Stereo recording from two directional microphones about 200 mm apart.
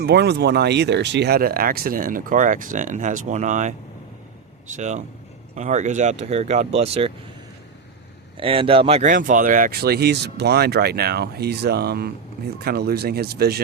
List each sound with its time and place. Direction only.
0.0 s speech: 55° right (ahead or behind); by 3.8 s 40° right (ahead or behind)
4.8 s speech: 35° right (ahead or behind)
8.4 s speech: 25° right (ahead or behind); by 13.6 s 50° right (ahead or behind)